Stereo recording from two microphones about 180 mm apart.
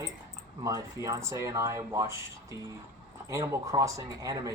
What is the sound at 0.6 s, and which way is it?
Speech, 20° right (ahead or behind).